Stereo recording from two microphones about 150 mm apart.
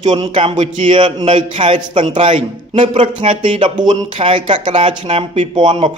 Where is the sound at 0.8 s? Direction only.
35° right (ahead or behind).